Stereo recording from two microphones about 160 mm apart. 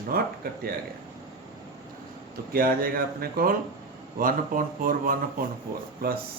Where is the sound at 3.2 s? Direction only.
65° right (ahead or behind).